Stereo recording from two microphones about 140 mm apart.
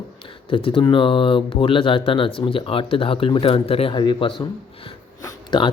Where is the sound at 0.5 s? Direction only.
40° left (ahead or behind).